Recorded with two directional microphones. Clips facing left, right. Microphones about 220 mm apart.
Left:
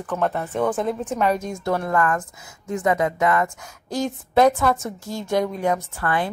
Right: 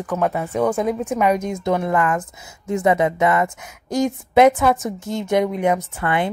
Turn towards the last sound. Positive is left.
turn(degrees=-20)  # may be behind; listen again after turning